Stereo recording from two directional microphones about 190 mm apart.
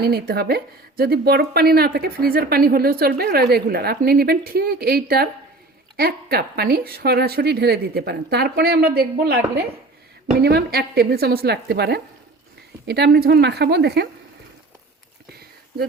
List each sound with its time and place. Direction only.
0.0 s a woman's voice: 55° right (ahead or behind)